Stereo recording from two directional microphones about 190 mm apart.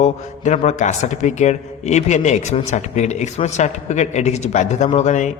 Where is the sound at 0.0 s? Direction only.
35° left (ahead or behind).